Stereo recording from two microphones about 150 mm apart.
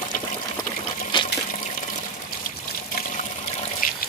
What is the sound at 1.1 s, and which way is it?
Water, 30° left (ahead or behind).